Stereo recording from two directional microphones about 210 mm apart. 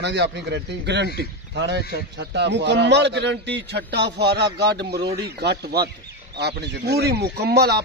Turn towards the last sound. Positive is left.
turn(degrees=-50)  # may be behind; listen again after turning